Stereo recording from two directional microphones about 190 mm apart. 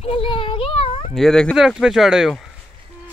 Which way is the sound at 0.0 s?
30° left (ahead or behind).